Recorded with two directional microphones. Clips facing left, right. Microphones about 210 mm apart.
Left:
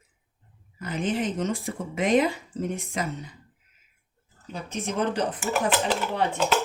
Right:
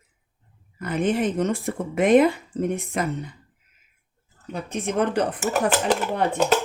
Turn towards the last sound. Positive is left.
turn(degrees=-45)  # may be behind; listen again after turning